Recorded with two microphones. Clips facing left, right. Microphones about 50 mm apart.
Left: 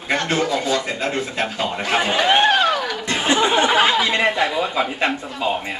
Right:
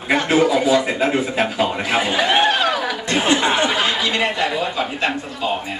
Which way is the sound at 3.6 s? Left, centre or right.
Left.